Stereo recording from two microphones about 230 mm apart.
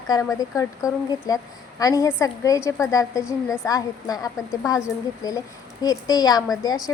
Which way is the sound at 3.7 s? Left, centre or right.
Centre.